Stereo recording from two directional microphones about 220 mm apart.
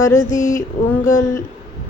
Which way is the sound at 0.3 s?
35° left (ahead or behind).